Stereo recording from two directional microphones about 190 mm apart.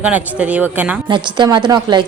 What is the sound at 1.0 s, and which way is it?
A woman's voice, 25° right (ahead or behind).